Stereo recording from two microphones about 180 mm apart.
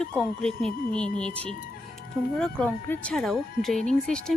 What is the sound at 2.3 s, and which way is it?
Speech, 5° left (ahead or behind).